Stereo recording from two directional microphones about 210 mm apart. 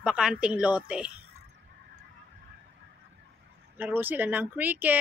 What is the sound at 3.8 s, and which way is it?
Speech, 10° right (ahead or behind).